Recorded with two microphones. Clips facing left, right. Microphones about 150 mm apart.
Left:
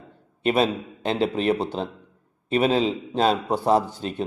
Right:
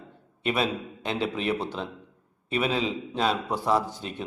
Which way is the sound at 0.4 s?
30° left (ahead or behind).